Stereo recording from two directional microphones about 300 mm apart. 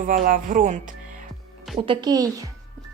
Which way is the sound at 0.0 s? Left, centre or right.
Right.